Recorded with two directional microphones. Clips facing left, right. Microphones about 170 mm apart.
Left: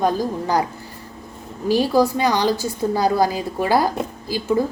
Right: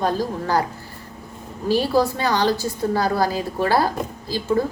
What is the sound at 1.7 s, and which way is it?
A woman's voice, 15° left (ahead or behind).